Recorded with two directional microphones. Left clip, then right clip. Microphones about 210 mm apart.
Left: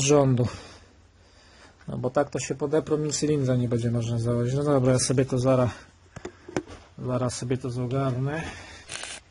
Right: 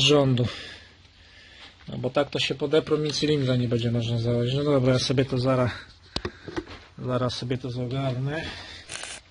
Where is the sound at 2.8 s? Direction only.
Centre (ahead or behind).